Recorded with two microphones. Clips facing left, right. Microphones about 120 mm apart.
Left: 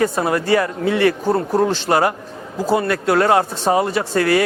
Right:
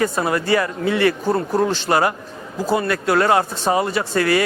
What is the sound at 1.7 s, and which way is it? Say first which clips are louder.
Speech: left 1 dB; 50° left (ahead or behind).